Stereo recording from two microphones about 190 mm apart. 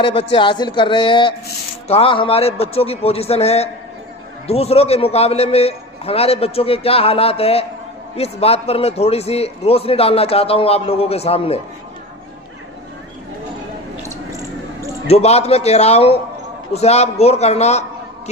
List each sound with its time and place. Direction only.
0.0 s a man's voice: 30° left (ahead or behind)
14.1 s a sound: 15° right (ahead or behind)
15.0 s a man's voice: 35° left (ahead or behind)